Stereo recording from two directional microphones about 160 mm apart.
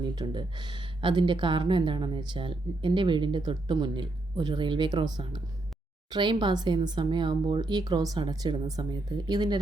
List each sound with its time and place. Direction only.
0.0 s speech: 25° right (ahead or behind)